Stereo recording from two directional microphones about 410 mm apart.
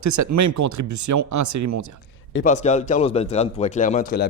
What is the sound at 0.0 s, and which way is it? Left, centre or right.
Speech, right.